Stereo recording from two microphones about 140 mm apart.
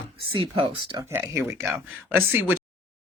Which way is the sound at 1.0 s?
20° right (ahead or behind).